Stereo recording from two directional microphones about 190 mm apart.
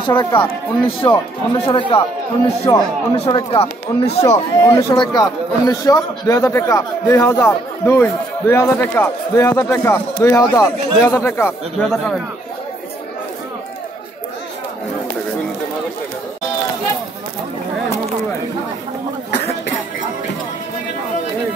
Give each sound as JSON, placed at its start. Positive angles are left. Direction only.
{"t": 0.0, "sound": "speech", "side_deg": 25}
{"t": 4.2, "sound": "a man's voice", "side_deg": 15}